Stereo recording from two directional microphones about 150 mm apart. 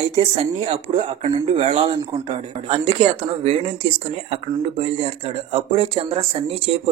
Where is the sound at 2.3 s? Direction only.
40° right (ahead or behind).